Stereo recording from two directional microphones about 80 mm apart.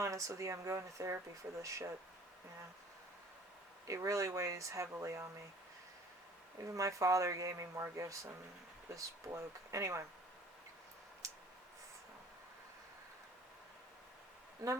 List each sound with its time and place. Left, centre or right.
0.0 s speech: right
3.8 s speech: right
6.7 s speech: right
14.6 s speech: right